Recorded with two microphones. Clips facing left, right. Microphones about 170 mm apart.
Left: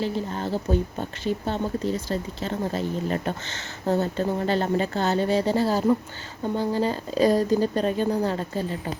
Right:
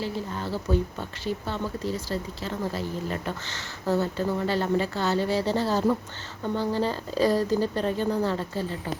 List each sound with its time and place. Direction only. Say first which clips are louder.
0.0 s speech: left 4 dB; 20° left (ahead or behind)